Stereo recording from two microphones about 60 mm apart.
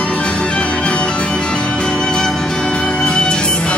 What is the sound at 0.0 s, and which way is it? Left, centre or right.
Music, centre.